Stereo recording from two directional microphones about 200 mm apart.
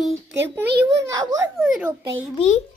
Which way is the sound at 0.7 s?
55° right (ahead or behind).